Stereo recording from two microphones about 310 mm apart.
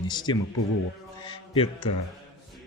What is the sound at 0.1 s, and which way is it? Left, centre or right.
A man's voice, centre.